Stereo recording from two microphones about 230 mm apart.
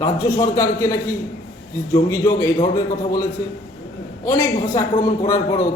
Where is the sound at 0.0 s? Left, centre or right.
Centre.